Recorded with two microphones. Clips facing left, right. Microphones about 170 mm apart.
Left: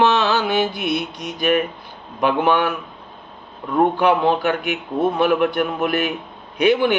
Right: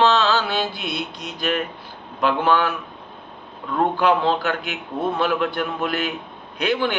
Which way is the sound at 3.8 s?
15° left (ahead or behind).